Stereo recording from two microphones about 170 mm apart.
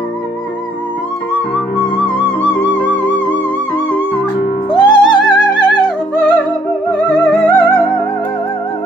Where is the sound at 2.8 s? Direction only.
10° left (ahead or behind).